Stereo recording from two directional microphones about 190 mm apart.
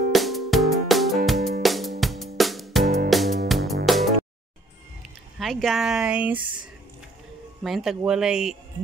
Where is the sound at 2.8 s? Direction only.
55° right (ahead or behind).